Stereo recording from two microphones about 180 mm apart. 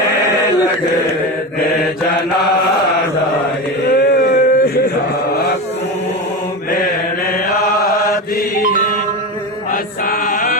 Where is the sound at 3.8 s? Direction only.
60° left (ahead or behind).